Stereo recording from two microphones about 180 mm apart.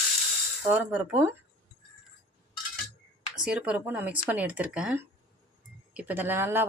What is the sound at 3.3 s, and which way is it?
Speech, 5° right (ahead or behind).